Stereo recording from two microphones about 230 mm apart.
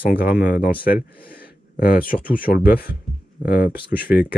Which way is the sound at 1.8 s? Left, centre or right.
Left.